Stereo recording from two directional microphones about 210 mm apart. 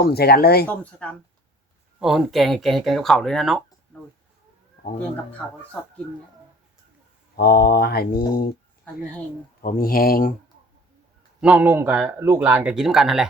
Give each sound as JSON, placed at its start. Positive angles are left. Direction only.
{"t": 0.0, "sound": "speech", "side_deg": 50}
{"t": 0.7, "sound": "speech", "side_deg": 5}
{"t": 3.9, "sound": "a sound", "side_deg": 5}
{"t": 7.3, "sound": "speech", "side_deg": 45}
{"t": 9.6, "sound": "speech", "side_deg": 40}
{"t": 11.3, "sound": "speech", "side_deg": -5}